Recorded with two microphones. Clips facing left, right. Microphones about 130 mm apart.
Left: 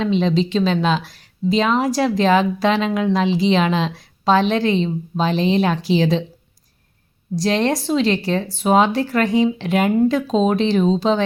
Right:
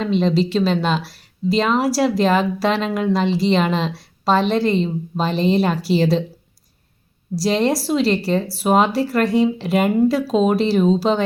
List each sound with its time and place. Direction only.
0.0 s speech: centre (ahead or behind)
7.3 s speech: 5° right (ahead or behind)